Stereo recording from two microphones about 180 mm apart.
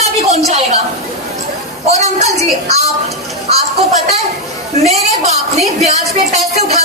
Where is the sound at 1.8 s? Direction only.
40° right (ahead or behind).